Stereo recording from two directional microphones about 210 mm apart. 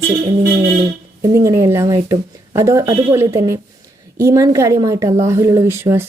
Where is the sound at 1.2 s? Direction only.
15° right (ahead or behind).